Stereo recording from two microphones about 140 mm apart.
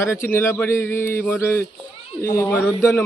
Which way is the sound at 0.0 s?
15° left (ahead or behind).